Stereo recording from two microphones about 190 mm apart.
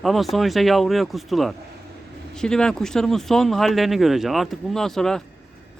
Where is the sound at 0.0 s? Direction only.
Centre (ahead or behind).